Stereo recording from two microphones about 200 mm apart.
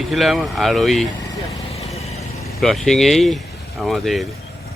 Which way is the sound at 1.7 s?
30° left (ahead or behind).